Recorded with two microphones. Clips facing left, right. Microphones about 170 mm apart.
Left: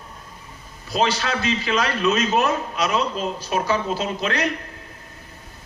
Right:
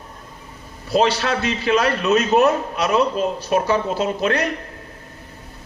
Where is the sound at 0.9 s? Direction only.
65° right (ahead or behind).